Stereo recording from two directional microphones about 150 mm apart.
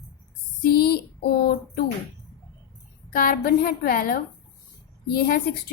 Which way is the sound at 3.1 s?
75° left (ahead or behind).